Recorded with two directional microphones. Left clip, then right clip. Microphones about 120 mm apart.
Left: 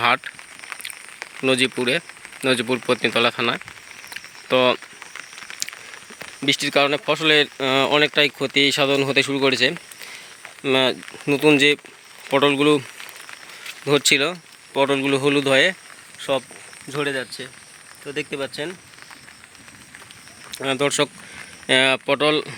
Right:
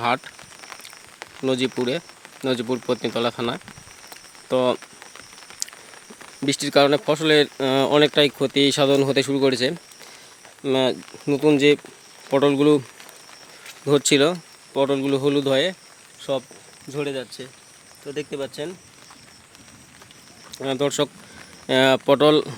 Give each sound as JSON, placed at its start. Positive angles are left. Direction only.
{"t": 1.2, "sound": "speech", "side_deg": -10}
{"t": 4.1, "sound": "cricket", "side_deg": -15}
{"t": 5.5, "sound": "a sound", "side_deg": -35}
{"t": 6.4, "sound": "speech", "side_deg": -40}
{"t": 10.6, "sound": "speech", "side_deg": -15}
{"t": 12.3, "sound": "speech", "side_deg": -30}
{"t": 13.8, "sound": "speech", "side_deg": -35}
{"t": 14.7, "sound": "speech", "side_deg": -10}
{"t": 16.2, "sound": "speech", "side_deg": 0}
{"t": 18.0, "sound": "speech", "side_deg": 15}
{"t": 20.5, "sound": "speech", "side_deg": -20}